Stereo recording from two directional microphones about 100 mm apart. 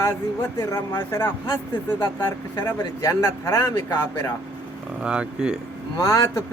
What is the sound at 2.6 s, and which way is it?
Speech, 30° left (ahead or behind).